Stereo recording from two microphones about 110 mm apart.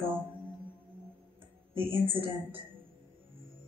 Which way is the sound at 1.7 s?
55° right (ahead or behind).